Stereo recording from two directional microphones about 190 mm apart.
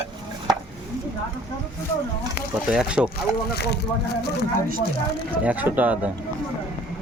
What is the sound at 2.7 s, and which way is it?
Speech, 5° right (ahead or behind).